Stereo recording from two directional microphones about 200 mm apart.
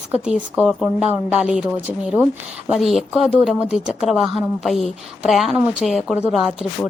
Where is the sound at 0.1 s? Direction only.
5° right (ahead or behind).